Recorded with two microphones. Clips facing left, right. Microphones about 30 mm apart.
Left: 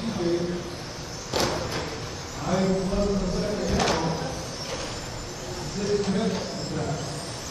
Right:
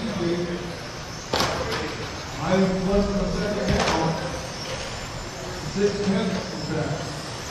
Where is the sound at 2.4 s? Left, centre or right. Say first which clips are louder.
Right 4 dB; right.